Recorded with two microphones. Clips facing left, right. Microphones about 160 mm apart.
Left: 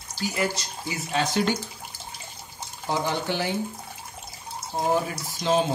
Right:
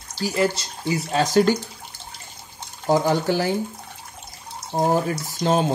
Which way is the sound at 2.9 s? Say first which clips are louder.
Right 7 dB; 40° right (ahead or behind).